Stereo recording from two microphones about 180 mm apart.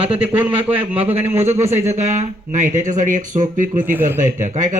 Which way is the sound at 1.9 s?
40° right (ahead or behind).